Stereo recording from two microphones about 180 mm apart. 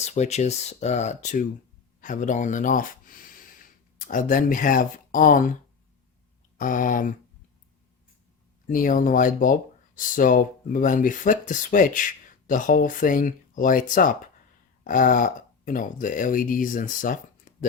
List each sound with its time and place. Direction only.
0.0 s speech: 40° left (ahead or behind)
6.6 s speech: 45° left (ahead or behind)
8.7 s speech: 45° left (ahead or behind)